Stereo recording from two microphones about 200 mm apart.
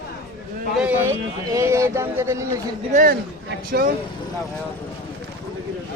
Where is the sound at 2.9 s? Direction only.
45° right (ahead or behind).